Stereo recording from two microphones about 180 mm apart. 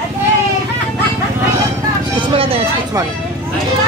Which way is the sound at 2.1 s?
30° right (ahead or behind).